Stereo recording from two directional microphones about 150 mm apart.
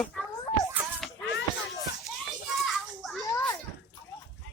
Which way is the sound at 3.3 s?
20° left (ahead or behind).